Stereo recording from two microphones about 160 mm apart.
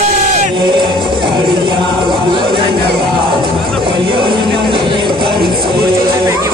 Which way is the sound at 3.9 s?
30° right (ahead or behind).